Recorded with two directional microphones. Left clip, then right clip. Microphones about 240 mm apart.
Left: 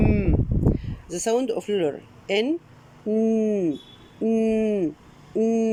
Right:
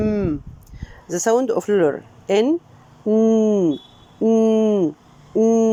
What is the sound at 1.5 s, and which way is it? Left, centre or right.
Speech, right.